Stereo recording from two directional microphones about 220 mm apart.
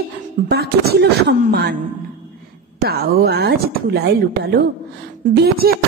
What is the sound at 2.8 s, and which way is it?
Speech, 45° right (ahead or behind).